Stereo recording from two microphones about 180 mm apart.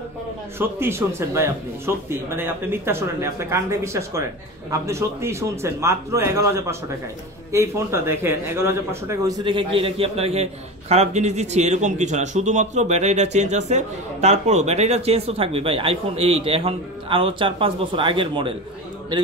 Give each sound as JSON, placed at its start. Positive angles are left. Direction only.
{"t": 0.6, "sound": "a man's voice", "side_deg": -15}